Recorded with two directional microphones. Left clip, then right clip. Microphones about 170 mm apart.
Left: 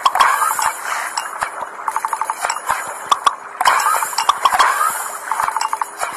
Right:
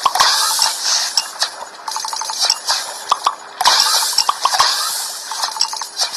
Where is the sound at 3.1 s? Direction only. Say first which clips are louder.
Left 2 dB; 20° right (ahead or behind).